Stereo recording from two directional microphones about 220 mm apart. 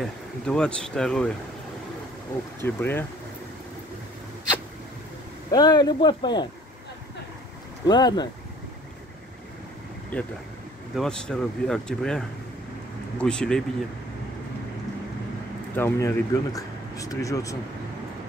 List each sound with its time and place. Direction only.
0.0 s speech: 5° left (ahead or behind)
2.6 s speech: 10° left (ahead or behind)
5.5 s speech: 20° left (ahead or behind)
7.8 s speech: 20° left (ahead or behind)
10.1 s speech: 5° left (ahead or behind)
15.7 s speech: 10° left (ahead or behind)